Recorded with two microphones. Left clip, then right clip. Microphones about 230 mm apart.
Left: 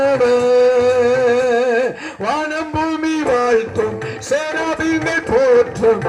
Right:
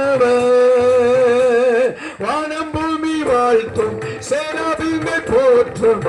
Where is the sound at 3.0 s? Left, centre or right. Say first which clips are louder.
Right 2 dB; left.